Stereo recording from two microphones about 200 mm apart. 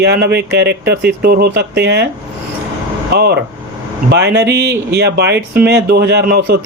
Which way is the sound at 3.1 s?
55° right (ahead or behind).